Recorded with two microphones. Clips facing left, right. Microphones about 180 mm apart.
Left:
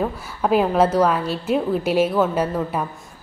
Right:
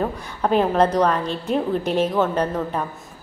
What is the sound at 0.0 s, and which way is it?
A woman's voice, 5° left (ahead or behind).